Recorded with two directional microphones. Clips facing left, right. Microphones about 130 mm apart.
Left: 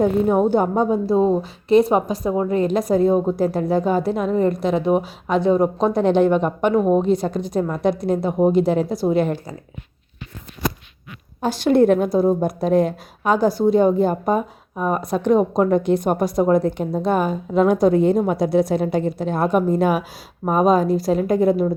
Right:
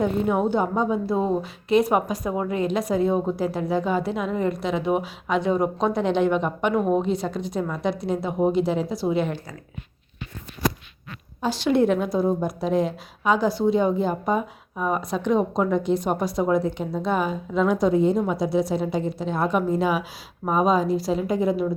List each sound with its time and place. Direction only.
0.0 s a woman's voice: 40° left (ahead or behind)
11.3 s a woman's voice: 45° left (ahead or behind)